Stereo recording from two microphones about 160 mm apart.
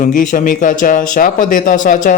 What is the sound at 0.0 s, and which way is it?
Speech, 55° left (ahead or behind).